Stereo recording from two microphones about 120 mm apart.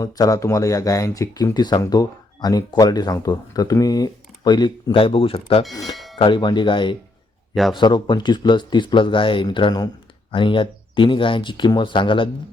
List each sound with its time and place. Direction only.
0.0 s speech: 30° left (ahead or behind)
7.5 s a man's voice: centre (ahead or behind)
7.8 s speech: 40° left (ahead or behind)